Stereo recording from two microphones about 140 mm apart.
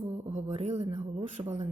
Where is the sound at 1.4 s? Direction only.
30° right (ahead or behind).